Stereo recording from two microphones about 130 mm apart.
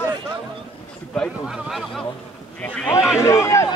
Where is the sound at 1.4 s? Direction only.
5° right (ahead or behind).